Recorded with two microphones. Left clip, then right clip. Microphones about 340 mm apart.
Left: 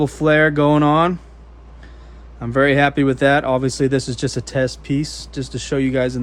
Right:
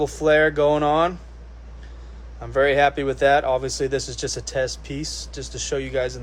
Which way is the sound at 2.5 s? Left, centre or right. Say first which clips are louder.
Left 3 dB; left.